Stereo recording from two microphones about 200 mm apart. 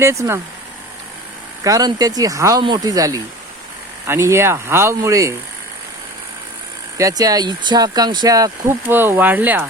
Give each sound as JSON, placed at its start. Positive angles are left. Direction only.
{"t": 0.0, "sound": "speech", "side_deg": -15}
{"t": 1.6, "sound": "speech", "side_deg": -20}
{"t": 6.9, "sound": "speech", "side_deg": -15}